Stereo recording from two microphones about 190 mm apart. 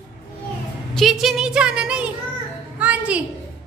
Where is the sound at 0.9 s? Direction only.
Centre (ahead or behind).